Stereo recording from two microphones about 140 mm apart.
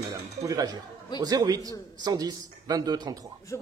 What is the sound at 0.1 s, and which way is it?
Music, 25° right (ahead or behind).